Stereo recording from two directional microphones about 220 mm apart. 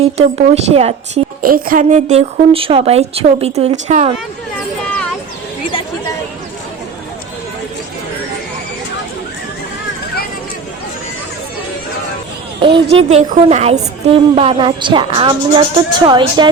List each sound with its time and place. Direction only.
0.0 s a woman's voice: 30° right (ahead or behind)
1.4 s a woman's voice: 40° right (ahead or behind)
12.6 s a woman's voice: 25° right (ahead or behind)